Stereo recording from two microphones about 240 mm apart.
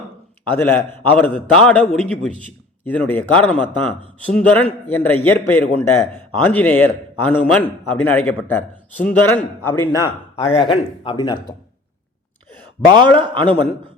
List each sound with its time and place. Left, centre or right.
0.4 s a man's voice: centre
12.9 s a man's voice: centre